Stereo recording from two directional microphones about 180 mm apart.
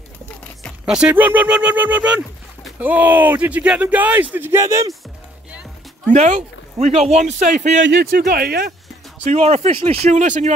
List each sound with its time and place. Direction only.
0.4 s speech: centre (ahead or behind); by 4.9 s 15° right (ahead or behind)
6.1 s speech: 40° right (ahead or behind)
7.8 s speech: 60° right (ahead or behind)
9.2 s speech: 40° right (ahead or behind)